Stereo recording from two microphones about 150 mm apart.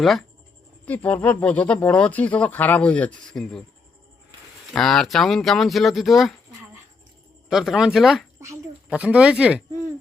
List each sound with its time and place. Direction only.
0.0 s speech: centre (ahead or behind)
4.8 s speech: centre (ahead or behind)
7.5 s speech: centre (ahead or behind)